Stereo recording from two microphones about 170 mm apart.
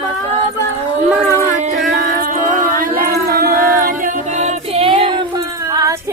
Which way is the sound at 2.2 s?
50° right (ahead or behind).